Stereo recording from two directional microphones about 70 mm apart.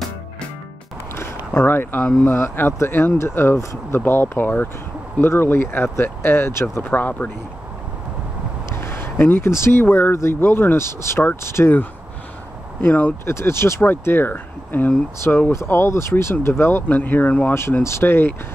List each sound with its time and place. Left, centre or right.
1.1 s a sound: left
2.2 s speech: left
8.7 s speech: left
12.8 s speech: left
13.2 s speech: left
17.8 s speech: left